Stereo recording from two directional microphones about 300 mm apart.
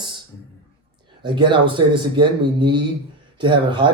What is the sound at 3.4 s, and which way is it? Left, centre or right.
Speech, centre.